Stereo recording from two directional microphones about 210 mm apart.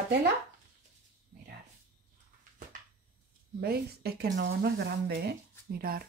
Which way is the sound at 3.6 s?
50° right (ahead or behind).